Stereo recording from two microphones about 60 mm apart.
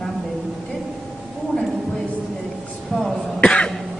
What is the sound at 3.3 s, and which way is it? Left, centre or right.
Cough, centre.